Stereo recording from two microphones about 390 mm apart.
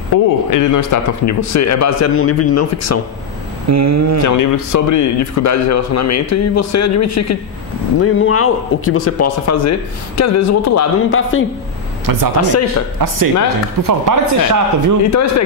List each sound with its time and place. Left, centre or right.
0.1 s a man's voice: left
3.7 s speech: right
4.2 s a man's voice: left
12.1 s speech: right
15.0 s a man's voice: left